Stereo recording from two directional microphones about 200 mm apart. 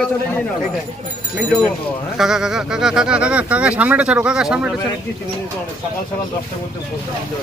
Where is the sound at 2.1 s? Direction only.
Centre (ahead or behind).